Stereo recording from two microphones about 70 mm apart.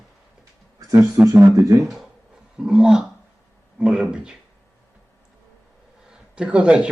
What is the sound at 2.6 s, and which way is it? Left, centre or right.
Speech, centre.